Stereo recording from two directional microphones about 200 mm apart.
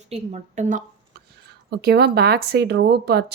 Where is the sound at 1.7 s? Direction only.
55° right (ahead or behind).